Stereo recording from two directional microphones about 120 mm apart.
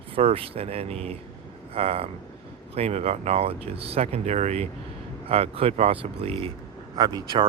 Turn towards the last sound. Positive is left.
turn(degrees=-35)  # may be behind; listen again after turning